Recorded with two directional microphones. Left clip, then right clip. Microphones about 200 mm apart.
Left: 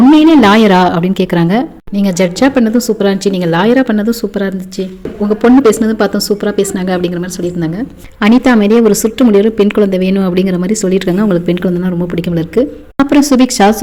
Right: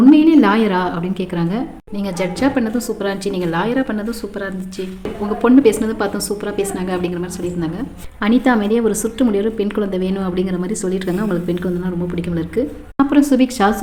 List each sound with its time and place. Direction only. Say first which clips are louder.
0.2 s a woman's voice: left 6 dB; 45° left (ahead or behind)